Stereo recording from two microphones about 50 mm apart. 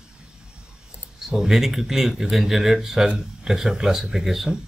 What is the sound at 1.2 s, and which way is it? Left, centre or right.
Speech, centre.